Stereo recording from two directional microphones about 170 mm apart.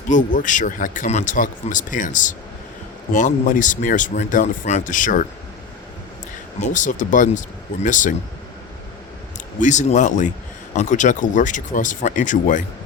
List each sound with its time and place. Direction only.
0.1 s speech: 50° left (ahead or behind)
6.6 s speech: 45° left (ahead or behind)
9.6 s speech: 45° left (ahead or behind)